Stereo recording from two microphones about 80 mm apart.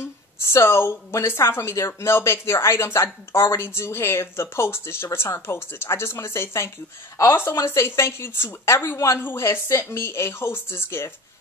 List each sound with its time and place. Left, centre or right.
0.0 s speech: left